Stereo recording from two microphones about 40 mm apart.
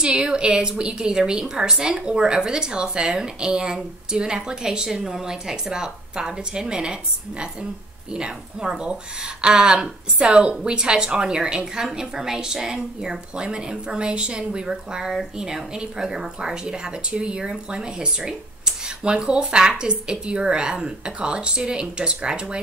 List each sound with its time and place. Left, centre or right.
0.0 s a woman's voice: right